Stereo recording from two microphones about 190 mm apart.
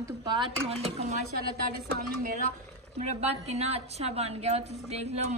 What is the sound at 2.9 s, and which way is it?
A woman's voice, 35° right (ahead or behind).